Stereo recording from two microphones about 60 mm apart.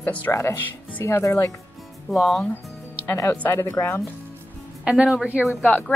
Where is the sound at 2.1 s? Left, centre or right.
Centre.